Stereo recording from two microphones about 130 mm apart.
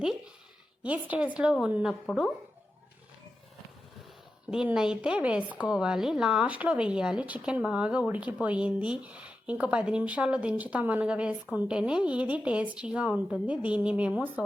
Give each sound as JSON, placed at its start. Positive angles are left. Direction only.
{"t": 0.8, "sound": "a woman's voice", "side_deg": -10}
{"t": 4.5, "sound": "a woman's voice", "side_deg": -5}